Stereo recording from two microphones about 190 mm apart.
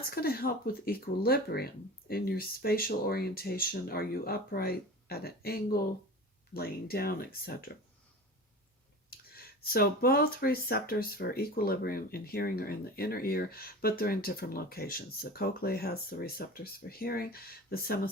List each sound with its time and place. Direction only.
0.1 s speech: 50° left (ahead or behind)
9.0 s speech: 55° left (ahead or behind)